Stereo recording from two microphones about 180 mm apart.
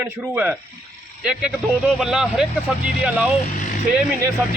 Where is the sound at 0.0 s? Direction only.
10° right (ahead or behind).